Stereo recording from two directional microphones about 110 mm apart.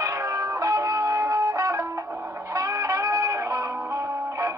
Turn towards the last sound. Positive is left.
turn(degrees=-30)  # may be behind; listen again after turning